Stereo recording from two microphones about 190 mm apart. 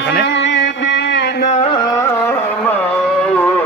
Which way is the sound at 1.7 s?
20° left (ahead or behind).